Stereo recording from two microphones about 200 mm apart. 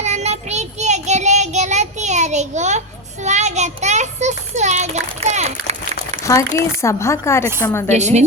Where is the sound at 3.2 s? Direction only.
35° right (ahead or behind).